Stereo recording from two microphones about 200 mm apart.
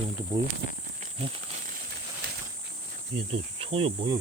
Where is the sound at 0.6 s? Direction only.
55° right (ahead or behind).